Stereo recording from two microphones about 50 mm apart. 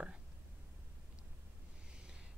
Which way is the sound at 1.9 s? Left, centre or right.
Centre.